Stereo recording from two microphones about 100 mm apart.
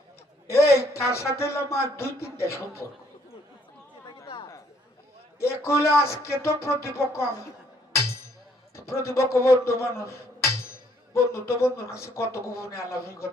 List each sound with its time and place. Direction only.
0.7 s speech: 30° left (ahead or behind)
5.4 s speech: 25° left (ahead or behind)
8.7 s speech: 25° left (ahead or behind)